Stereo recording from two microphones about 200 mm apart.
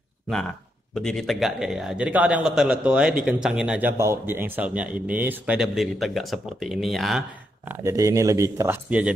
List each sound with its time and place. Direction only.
0.9 s speech: centre (ahead or behind)
7.8 s speech: 15° right (ahead or behind)